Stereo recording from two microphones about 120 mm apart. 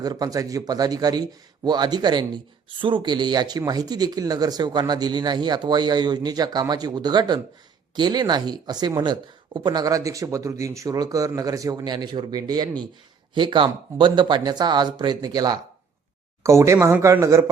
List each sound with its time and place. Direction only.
0.0 s speech: 30° right (ahead or behind)